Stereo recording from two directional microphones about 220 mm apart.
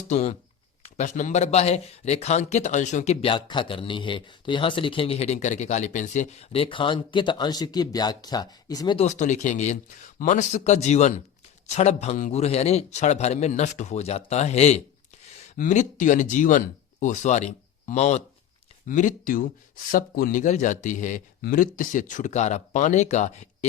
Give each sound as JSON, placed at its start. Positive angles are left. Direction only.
{"t": 0.1, "sound": "a man's voice", "side_deg": 30}
{"t": 9.0, "sound": "a man's voice", "side_deg": 35}